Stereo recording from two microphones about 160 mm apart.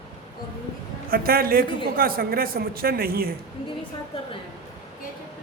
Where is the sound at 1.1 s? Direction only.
70° right (ahead or behind).